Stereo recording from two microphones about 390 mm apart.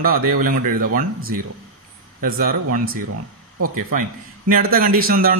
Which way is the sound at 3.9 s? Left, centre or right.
Right.